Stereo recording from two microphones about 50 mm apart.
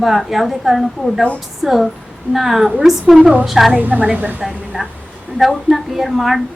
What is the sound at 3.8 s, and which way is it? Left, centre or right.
Speech, right.